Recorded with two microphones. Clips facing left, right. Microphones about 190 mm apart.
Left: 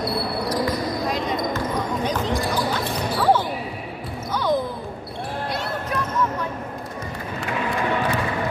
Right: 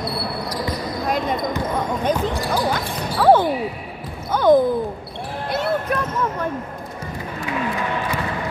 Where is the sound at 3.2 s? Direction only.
65° right (ahead or behind).